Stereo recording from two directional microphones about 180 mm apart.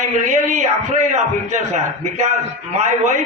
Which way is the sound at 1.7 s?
40° right (ahead or behind).